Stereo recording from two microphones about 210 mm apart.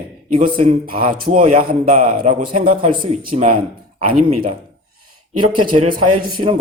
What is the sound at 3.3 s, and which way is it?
Speech, 35° right (ahead or behind).